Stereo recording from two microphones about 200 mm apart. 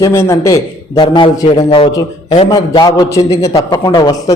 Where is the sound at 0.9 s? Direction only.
25° left (ahead or behind).